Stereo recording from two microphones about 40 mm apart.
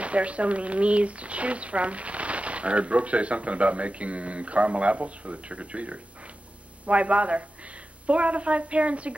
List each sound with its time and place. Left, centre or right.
0.0 s speech: right